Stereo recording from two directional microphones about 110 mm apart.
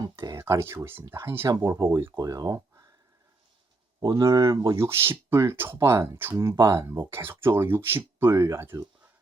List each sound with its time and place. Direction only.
0.0 s speech: 30° right (ahead or behind)
4.0 s speech: 35° right (ahead or behind)
4.8 s speech: 25° right (ahead or behind)